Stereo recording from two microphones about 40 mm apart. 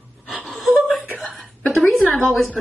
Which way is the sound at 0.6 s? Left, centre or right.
Centre.